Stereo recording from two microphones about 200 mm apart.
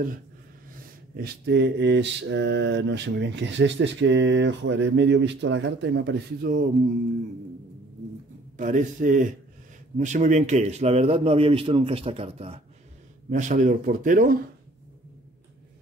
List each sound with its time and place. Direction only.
1.1 s mantra: 55° right (ahead or behind)
8.5 s a man's voice: 40° right (ahead or behind)